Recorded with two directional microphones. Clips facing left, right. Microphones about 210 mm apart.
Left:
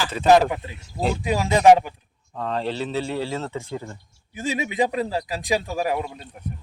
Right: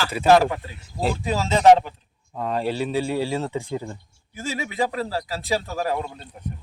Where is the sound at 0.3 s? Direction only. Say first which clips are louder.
Even; 20° left (ahead or behind).